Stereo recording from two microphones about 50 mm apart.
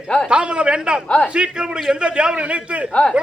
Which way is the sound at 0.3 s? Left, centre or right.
Right.